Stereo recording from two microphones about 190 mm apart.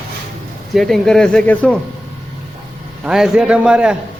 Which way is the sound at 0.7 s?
Centre (ahead or behind).